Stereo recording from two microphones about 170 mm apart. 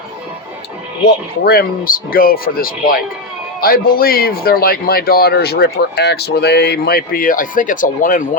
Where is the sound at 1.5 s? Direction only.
60° left (ahead or behind).